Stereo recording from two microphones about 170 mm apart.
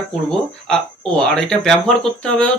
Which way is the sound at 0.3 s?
5° left (ahead or behind).